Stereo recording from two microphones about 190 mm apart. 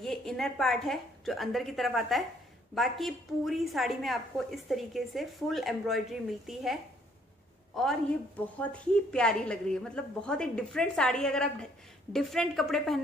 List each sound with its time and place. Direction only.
0.0 s a woman's voice: 5° left (ahead or behind)